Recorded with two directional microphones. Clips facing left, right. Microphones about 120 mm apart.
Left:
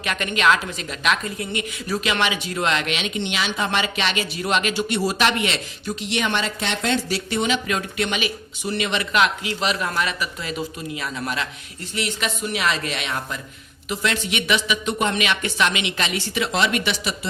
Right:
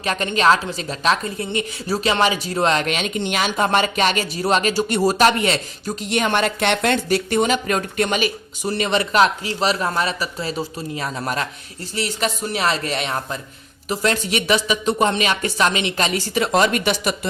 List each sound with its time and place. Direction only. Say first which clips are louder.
0.0 s a woman's voice: right 3 dB; 35° right (ahead or behind)